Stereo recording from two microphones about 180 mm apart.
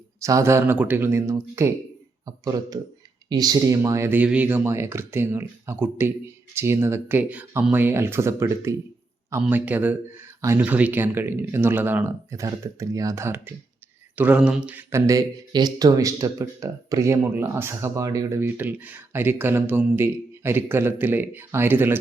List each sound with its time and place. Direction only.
0.2 s speech: 15° right (ahead or behind)